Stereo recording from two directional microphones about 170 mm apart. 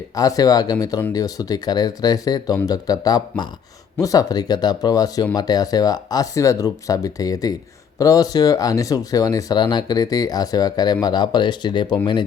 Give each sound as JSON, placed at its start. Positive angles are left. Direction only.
{"t": 0.2, "sound": "speech", "side_deg": 20}